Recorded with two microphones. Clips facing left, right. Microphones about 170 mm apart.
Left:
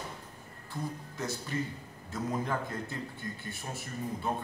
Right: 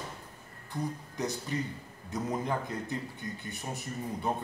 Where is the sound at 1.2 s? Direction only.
15° right (ahead or behind).